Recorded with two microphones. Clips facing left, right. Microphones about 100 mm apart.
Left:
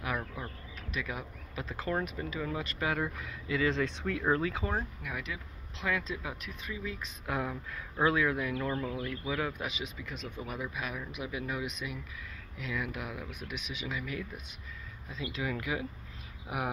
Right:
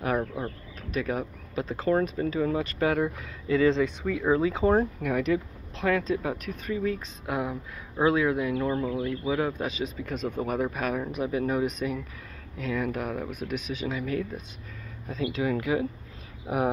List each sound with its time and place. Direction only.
0.0 s a sound: 35° right (ahead or behind)
0.9 s speech: 40° right (ahead or behind)
3.8 s speech: 5° right (ahead or behind)
4.3 s speech: 20° right (ahead or behind)
4.7 s speech: 50° right (ahead or behind)
5.9 s speech: 40° right (ahead or behind)
7.2 s speech: 20° right (ahead or behind)